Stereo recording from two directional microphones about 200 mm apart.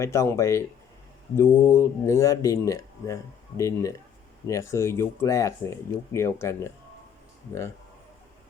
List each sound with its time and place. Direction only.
0.0 s speech: 15° left (ahead or behind)